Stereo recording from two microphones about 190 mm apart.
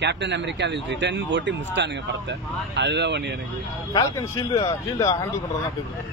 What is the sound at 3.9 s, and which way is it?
Speech, 20° left (ahead or behind).